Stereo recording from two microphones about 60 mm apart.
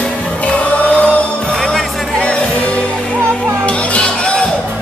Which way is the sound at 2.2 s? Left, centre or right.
Centre.